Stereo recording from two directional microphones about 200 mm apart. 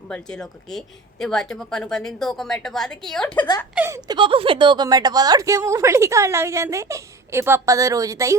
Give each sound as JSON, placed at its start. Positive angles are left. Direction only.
{"t": 0.1, "sound": "a woman's voice", "side_deg": 5}
{"t": 3.8, "sound": "a woman's voice", "side_deg": -15}